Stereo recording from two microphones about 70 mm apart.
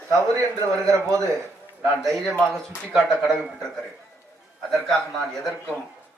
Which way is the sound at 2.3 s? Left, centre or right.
Centre.